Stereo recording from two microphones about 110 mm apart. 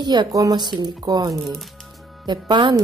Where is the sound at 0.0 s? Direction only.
40° right (ahead or behind).